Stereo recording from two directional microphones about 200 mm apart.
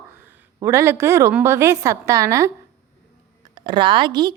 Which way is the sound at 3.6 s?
20° right (ahead or behind).